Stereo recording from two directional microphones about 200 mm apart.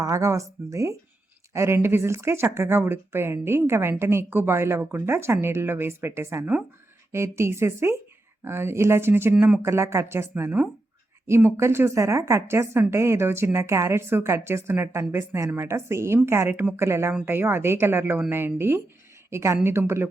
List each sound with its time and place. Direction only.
0.0 s a woman's voice: 15° right (ahead or behind)